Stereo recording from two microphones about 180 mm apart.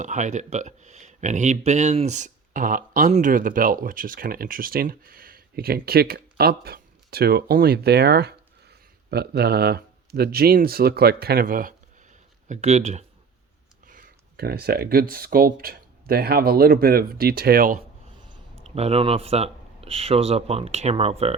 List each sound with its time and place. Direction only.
0.0 s speech: 45° right (ahead or behind)
12.5 s speech: 40° right (ahead or behind)
13.8 s speech: 50° right (ahead or behind)
18.2 s speech: 30° right (ahead or behind)